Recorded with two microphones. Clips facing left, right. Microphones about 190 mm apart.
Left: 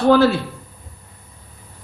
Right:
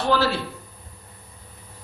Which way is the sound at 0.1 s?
50° left (ahead or behind).